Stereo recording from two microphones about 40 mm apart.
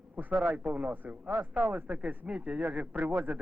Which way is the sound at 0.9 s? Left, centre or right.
Right.